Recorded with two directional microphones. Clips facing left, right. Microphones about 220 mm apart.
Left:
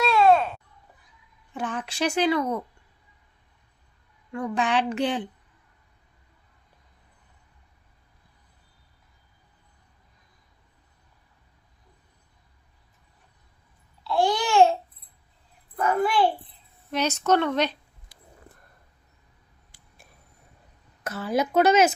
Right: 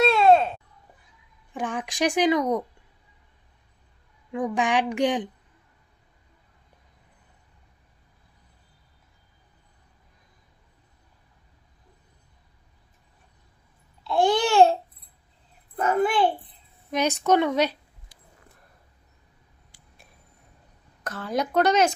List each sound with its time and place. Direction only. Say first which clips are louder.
0.0 s a sound: right 2 dB; 25° right (ahead or behind)
1.5 s speech: right 1 dB; 15° right (ahead or behind)
4.3 s speech: right 1 dB; 15° right (ahead or behind)
14.0 s babbling: right 2 dB; 20° right (ahead or behind)
15.8 s a sound: right 1 dB; 25° right (ahead or behind)
16.9 s a woman's voice: right 1 dB; 15° right (ahead or behind)
21.0 s speech: left 2 dB; 5° left (ahead or behind)